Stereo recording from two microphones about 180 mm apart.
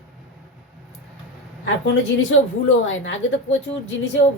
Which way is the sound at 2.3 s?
90° left.